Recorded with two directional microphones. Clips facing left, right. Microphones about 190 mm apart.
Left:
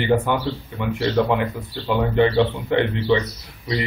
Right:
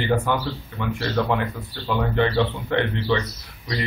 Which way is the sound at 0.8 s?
20° left (ahead or behind).